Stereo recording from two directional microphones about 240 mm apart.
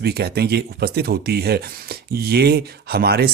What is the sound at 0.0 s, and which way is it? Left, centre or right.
Speech, right.